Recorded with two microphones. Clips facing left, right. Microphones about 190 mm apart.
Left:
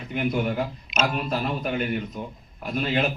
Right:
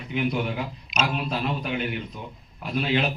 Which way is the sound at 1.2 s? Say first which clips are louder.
Left 1 dB; 50° left (ahead or behind).